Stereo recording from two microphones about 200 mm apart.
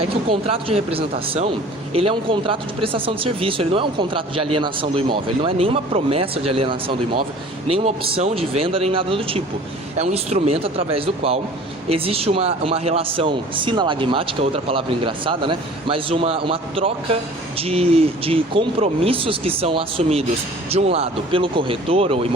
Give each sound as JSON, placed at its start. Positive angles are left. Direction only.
{"t": 0.0, "sound": "speech", "side_deg": -25}